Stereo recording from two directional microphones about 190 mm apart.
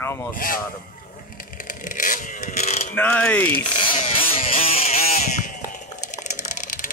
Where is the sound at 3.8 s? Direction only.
30° left (ahead or behind).